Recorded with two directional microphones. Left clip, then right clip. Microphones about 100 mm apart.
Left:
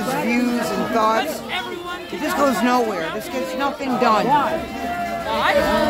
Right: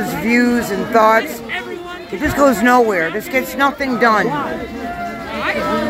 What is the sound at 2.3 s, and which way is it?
Speech, 35° right (ahead or behind).